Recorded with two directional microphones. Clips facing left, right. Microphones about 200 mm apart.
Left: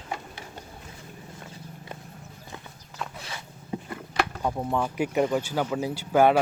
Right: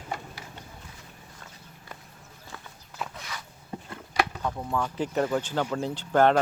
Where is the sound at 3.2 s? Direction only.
30° left (ahead or behind).